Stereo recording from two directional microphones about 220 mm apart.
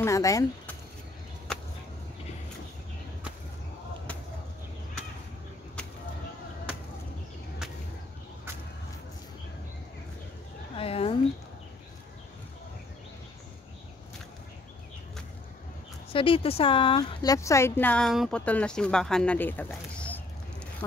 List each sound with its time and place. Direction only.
0.0 s speech: 15° left (ahead or behind)
10.8 s a sound: 25° left (ahead or behind)
16.1 s speech: 25° left (ahead or behind); by 20.2 s 5° left (ahead or behind)